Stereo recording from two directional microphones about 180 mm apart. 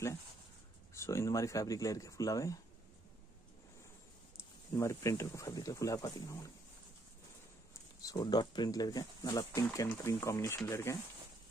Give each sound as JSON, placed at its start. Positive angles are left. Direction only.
{"t": 0.9, "sound": "speech", "side_deg": 15}
{"t": 4.7, "sound": "speech", "side_deg": 15}
{"t": 8.0, "sound": "speech", "side_deg": 20}